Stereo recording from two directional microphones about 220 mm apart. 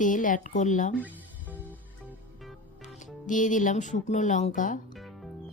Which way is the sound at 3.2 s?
35° left (ahead or behind).